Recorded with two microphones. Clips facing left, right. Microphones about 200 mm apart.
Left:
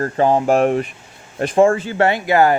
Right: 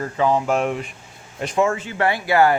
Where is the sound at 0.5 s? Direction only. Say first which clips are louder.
Left 6 dB; 55° left (ahead or behind).